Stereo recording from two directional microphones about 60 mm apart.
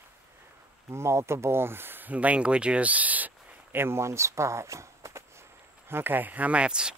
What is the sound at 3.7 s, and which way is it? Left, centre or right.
Speech, right.